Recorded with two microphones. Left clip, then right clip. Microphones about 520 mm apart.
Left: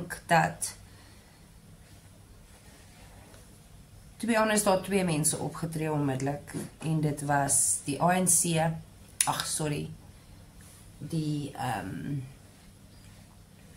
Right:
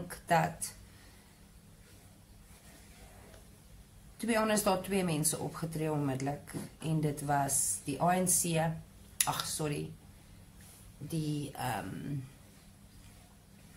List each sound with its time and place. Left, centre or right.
0.1 s a sound: right
4.2 s speech: right
11.1 s speech: right